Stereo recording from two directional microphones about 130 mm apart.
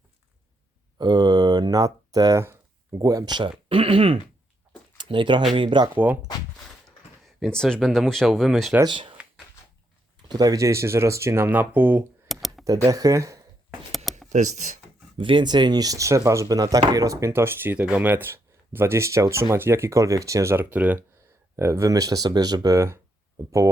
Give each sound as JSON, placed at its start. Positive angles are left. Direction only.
{"t": 0.9, "sound": "speech", "side_deg": -35}
{"t": 5.9, "sound": "speech", "side_deg": -15}
{"t": 7.3, "sound": "speech", "side_deg": 0}
{"t": 8.8, "sound": "speech", "side_deg": -40}
{"t": 10.2, "sound": "speech", "side_deg": -30}
{"t": 12.3, "sound": "a sound", "side_deg": 0}
{"t": 12.6, "sound": "speech", "side_deg": -25}
{"t": 13.9, "sound": "a sound", "side_deg": 0}
{"t": 14.3, "sound": "speech", "side_deg": -70}
{"t": 15.2, "sound": "speech", "side_deg": -40}
{"t": 21.5, "sound": "speech", "side_deg": -20}